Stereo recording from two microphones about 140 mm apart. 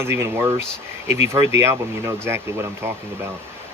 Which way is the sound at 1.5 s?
20° right (ahead or behind).